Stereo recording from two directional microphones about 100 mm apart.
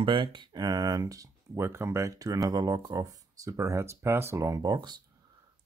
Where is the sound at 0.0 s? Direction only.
55° right (ahead or behind).